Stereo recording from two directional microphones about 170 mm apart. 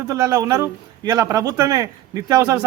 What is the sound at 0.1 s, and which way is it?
A man's voice, 20° right (ahead or behind).